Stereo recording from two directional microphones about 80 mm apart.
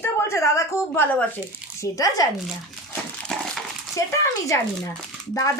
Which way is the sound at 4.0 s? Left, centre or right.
Left.